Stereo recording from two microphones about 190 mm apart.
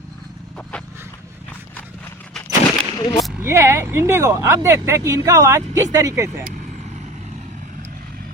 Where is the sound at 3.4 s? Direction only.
15° right (ahead or behind).